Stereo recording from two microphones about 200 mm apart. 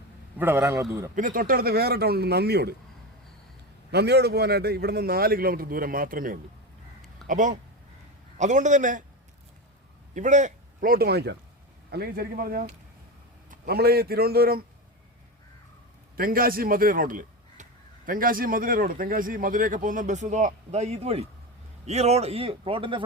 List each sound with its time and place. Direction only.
0.3 s a man's voice: 10° right (ahead or behind)
1.1 s speech: 45° right (ahead or behind)
3.9 s a man's voice: 55° right (ahead or behind); by 9.0 s 40° right (ahead or behind)
10.2 s speech: 35° right (ahead or behind)
16.1 s a man's voice: 45° right (ahead or behind); by 23.0 s 25° right (ahead or behind)